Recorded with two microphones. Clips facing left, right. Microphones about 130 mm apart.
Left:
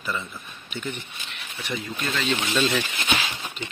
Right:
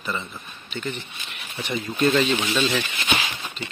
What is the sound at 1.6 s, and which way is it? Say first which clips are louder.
Speech: right 8 dB; 25° right (ahead or behind).